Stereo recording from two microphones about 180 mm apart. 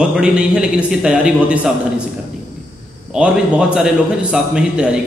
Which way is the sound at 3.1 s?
5° right (ahead or behind).